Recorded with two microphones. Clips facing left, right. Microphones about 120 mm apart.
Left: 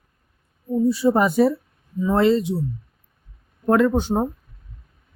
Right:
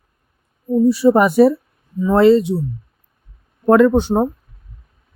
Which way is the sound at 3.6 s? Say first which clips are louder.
Right 6 dB; 90° right.